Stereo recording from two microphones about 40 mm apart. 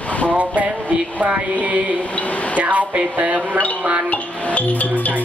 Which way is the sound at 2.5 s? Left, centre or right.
Right.